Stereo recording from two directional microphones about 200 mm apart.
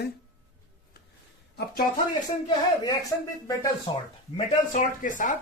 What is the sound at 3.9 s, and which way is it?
Speech, 25° left (ahead or behind).